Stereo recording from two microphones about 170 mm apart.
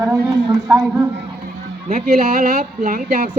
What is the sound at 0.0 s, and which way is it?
Speech, 15° right (ahead or behind).